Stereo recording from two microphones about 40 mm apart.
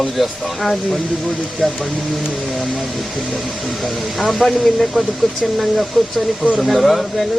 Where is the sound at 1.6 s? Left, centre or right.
Centre.